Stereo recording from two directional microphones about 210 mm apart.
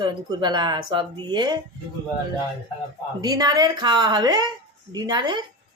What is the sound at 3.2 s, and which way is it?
Speech, 20° right (ahead or behind).